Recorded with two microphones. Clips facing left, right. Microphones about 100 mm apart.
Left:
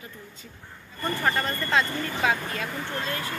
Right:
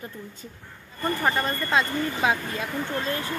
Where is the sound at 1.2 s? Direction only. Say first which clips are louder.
Even; 20° right (ahead or behind).